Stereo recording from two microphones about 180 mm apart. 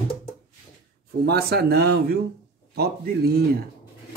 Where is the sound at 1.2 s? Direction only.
60° right (ahead or behind).